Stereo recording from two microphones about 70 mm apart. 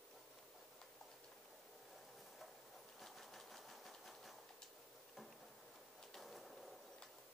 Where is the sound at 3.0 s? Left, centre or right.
Centre.